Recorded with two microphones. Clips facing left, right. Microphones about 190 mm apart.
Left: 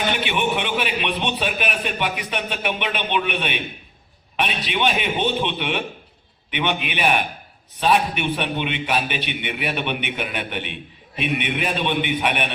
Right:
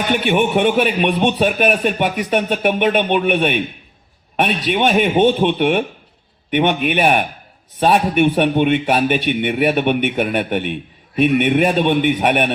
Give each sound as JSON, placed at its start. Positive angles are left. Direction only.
{"t": 0.1, "sound": "a man's voice", "side_deg": -45}